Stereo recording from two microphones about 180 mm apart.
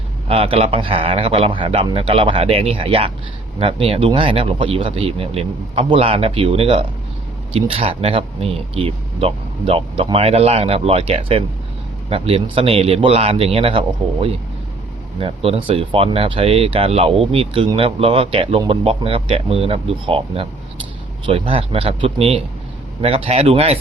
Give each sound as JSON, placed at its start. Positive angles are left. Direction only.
{"t": 0.3, "sound": "speech", "side_deg": -30}